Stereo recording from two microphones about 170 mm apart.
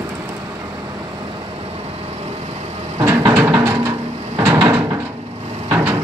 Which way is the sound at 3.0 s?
15° right (ahead or behind).